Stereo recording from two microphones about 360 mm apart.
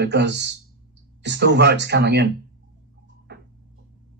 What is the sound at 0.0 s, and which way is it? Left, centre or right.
Speech, right.